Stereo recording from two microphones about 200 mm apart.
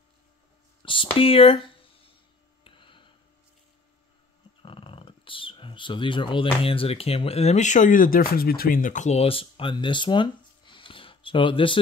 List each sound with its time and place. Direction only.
0.8 s speech: 25° left (ahead or behind)
2.6 s a sound: 25° left (ahead or behind)
4.6 s speech: 25° left (ahead or behind)